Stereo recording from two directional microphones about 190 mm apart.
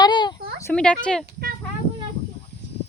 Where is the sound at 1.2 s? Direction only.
50° right (ahead or behind).